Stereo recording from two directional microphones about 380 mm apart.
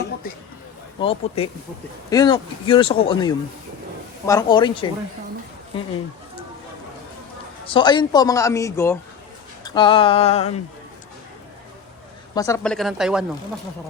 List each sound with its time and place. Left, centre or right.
0.9 s speech: centre
7.7 s speech: centre
12.3 s speech: centre